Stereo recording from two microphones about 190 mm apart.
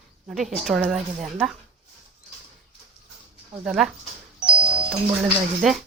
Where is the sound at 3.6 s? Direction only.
5° right (ahead or behind).